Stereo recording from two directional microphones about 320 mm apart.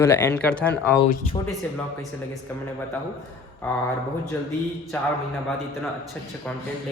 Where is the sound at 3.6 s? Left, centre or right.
Centre.